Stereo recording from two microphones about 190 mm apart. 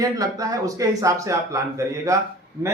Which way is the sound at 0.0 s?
20° right (ahead or behind).